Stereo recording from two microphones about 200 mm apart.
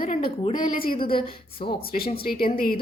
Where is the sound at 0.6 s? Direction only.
45° left (ahead or behind).